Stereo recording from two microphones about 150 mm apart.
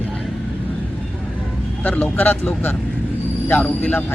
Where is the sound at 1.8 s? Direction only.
10° left (ahead or behind).